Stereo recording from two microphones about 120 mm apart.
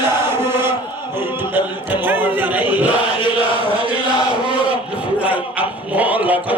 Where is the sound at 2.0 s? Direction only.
15° right (ahead or behind).